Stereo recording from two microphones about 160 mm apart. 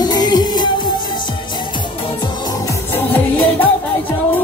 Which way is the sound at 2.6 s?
10° left (ahead or behind).